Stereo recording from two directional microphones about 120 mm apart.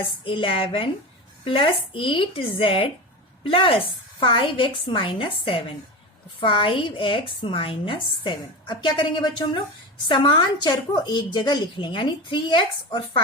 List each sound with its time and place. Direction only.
0.3 s a woman's voice: 50° left (ahead or behind)